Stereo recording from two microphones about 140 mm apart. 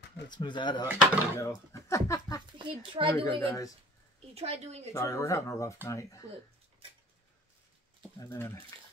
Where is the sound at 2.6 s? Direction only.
35° right (ahead or behind).